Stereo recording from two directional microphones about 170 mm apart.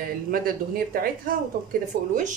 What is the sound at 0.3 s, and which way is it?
Speech, 55° right (ahead or behind).